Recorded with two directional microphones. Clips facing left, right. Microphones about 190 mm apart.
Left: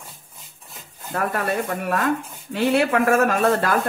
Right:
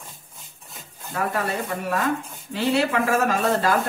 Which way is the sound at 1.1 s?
55° left (ahead or behind).